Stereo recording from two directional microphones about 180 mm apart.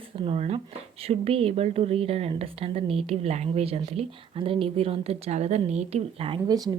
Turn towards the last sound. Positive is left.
turn(degrees=-20)  # may be behind; listen again after turning